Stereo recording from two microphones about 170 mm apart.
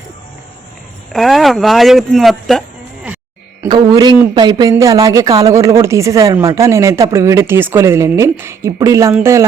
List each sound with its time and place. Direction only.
1.1 s speech: centre (ahead or behind)
3.7 s speech: 25° right (ahead or behind)